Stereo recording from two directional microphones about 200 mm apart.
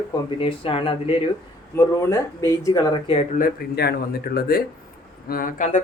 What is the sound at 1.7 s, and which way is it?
Speech, 15° left (ahead or behind).